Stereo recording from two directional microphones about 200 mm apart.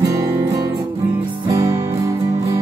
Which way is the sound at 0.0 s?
15° right (ahead or behind).